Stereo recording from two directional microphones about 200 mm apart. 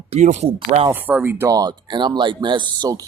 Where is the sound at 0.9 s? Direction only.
10° right (ahead or behind).